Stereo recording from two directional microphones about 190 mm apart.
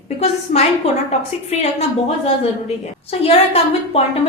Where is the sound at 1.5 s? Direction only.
35° left (ahead or behind).